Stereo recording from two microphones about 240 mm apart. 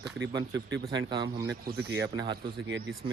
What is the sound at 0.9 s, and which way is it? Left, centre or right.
Speech, centre.